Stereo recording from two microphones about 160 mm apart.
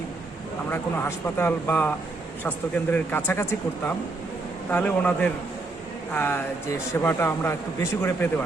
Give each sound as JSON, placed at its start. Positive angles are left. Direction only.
{"t": 0.7, "sound": "speech", "side_deg": 15}